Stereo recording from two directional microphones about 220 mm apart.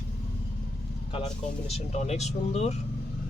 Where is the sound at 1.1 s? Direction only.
30° left (ahead or behind).